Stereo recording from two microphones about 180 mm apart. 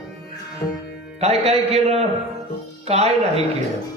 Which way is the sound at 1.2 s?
35° right (ahead or behind).